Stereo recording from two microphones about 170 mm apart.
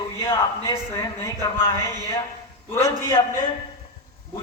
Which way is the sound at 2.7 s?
15° left (ahead or behind).